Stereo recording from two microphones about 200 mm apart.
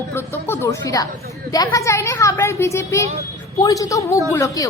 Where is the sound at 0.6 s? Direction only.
15° left (ahead or behind).